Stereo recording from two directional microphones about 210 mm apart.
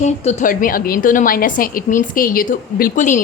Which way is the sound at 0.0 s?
35° left (ahead or behind).